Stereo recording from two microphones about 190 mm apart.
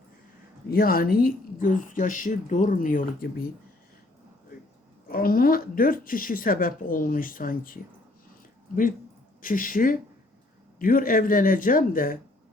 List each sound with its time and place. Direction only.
0.7 s speech: 50° left (ahead or behind)
5.0 s speech: 50° left (ahead or behind)
9.4 s speech: 45° left (ahead or behind)